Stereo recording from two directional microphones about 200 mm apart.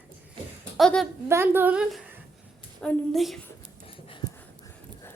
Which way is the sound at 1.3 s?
10° right (ahead or behind).